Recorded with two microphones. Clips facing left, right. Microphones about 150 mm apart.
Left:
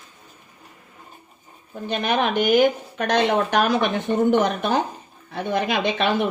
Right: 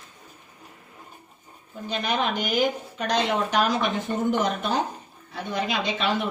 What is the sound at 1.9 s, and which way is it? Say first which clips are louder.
A woman's voice: left 4 dB; 60° left (ahead or behind).